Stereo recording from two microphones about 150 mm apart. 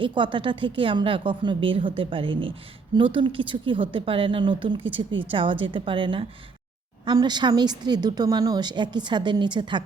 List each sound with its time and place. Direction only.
0.0 s a woman's voice: 35° right (ahead or behind)